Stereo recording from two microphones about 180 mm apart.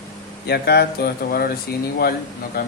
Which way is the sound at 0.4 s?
65° left (ahead or behind).